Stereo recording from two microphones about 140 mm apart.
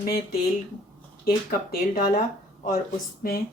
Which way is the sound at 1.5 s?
90° left.